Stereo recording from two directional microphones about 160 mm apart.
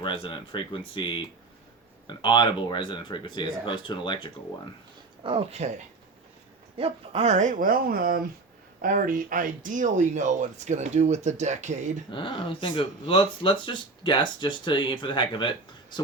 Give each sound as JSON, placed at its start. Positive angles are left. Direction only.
{"t": 0.0, "sound": "speech", "side_deg": 30}
{"t": 5.2, "sound": "speech", "side_deg": -35}
{"t": 6.7, "sound": "speech", "side_deg": -35}
{"t": 12.1, "sound": "speech", "side_deg": 30}